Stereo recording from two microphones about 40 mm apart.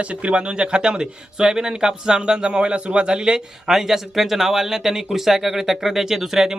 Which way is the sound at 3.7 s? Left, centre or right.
Centre.